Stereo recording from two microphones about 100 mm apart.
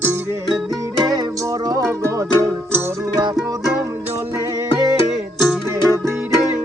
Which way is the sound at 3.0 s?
40° right (ahead or behind).